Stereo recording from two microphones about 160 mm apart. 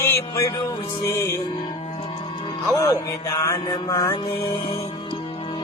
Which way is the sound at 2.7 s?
20° left (ahead or behind).